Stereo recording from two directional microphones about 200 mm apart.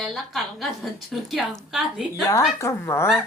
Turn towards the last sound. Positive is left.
turn(degrees=10)  # may be behind; listen again after turning